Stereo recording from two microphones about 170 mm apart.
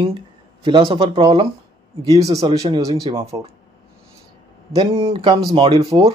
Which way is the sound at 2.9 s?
20° right (ahead or behind).